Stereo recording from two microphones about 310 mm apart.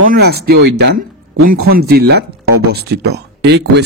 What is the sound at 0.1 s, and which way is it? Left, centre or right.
Speech, right.